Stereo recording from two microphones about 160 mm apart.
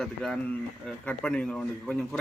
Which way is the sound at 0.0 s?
Centre (ahead or behind).